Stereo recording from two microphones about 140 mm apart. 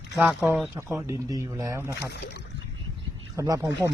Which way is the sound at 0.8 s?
15° right (ahead or behind).